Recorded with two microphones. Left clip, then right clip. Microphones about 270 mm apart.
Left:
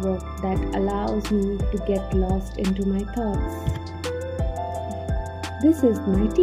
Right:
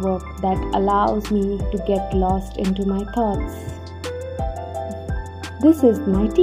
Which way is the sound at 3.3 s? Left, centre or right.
Centre.